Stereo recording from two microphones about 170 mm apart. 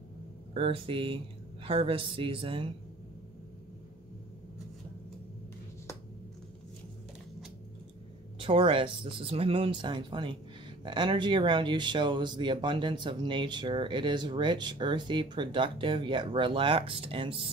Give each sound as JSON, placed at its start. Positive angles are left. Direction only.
{"t": 0.6, "sound": "speech", "side_deg": -30}
{"t": 8.4, "sound": "speech", "side_deg": -30}